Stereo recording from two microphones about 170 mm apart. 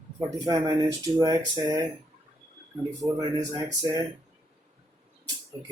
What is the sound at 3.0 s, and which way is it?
Speech, 20° right (ahead or behind).